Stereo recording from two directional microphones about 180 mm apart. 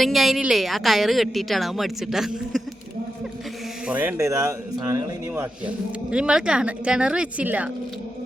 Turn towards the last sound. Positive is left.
turn(degrees=-10)  # may be behind; listen again after turning